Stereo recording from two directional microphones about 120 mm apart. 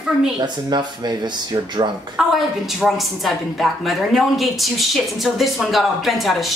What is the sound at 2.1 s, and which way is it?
A woman's voice, centre (ahead or behind).